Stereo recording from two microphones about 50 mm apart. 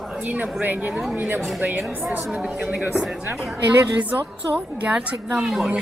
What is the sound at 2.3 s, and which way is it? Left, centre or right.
A woman's voice, centre.